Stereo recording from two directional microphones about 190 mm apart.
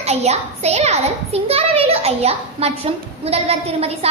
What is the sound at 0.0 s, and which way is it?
A child's voice, 35° right (ahead or behind).